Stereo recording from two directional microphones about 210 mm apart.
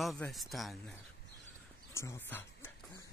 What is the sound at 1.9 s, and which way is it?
Speech, 15° left (ahead or behind).